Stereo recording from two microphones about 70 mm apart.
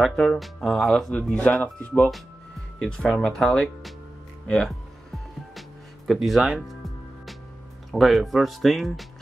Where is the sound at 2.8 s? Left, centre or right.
Centre.